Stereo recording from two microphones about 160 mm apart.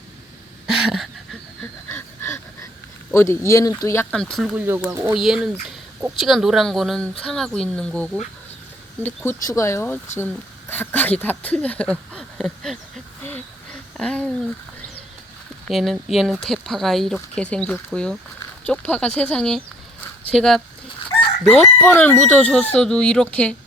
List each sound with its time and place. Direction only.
0.7 s a sound: 5° right (ahead or behind)
1.9 s dog: 15° left (ahead or behind)
3.1 s speech: 15° left (ahead or behind)
4.1 s speech: 5° left (ahead or behind)
4.6 s speech: 15° right (ahead or behind)
5.1 s speech: centre (ahead or behind)
9.0 s speech: 20° left (ahead or behind); by 12.8 s centre (ahead or behind)
13.9 s speech: 5° left (ahead or behind)
15.6 s speech: centre (ahead or behind)